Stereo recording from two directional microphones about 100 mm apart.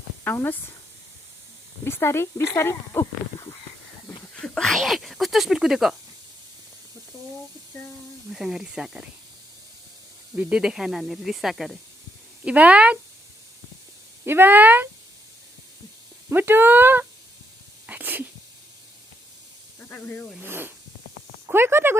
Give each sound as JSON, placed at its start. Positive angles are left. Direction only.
{"t": 0.3, "sound": "speech", "side_deg": 20}
{"t": 1.8, "sound": "speech", "side_deg": 25}
{"t": 4.4, "sound": "a sound", "side_deg": 5}
{"t": 7.7, "sound": "speech", "side_deg": 20}
{"t": 8.3, "sound": "speech", "side_deg": -5}
{"t": 10.3, "sound": "speech", "side_deg": -10}
{"t": 12.5, "sound": "speech", "side_deg": -15}
{"t": 14.3, "sound": "speech", "side_deg": -20}
{"t": 16.3, "sound": "speech", "side_deg": -20}
{"t": 17.8, "sound": "a sound", "side_deg": -15}
{"t": 19.9, "sound": "speech", "side_deg": 15}
{"t": 20.4, "sound": "speech", "side_deg": -20}